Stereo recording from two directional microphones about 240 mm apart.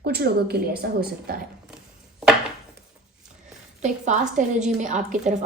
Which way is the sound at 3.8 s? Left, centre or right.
Right.